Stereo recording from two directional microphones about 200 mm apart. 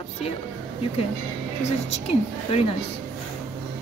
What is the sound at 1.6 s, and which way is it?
A woman's voice, 30° left (ahead or behind).